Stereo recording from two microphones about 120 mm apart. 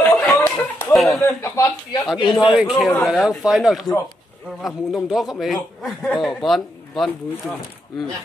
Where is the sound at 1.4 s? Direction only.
20° left (ahead or behind).